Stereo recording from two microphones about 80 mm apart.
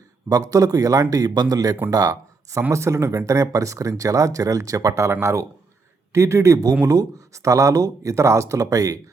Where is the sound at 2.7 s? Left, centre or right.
Right.